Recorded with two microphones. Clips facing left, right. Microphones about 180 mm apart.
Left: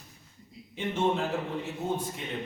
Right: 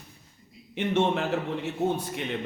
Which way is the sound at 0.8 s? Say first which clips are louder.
Right 3 dB; 75° right (ahead or behind).